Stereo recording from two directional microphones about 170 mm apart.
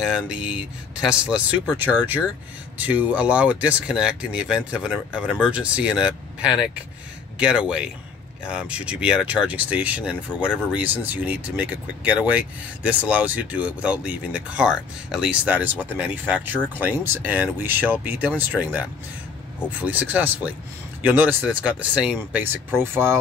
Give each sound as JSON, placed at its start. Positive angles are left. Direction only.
{"t": 0.0, "sound": "speech", "side_deg": -5}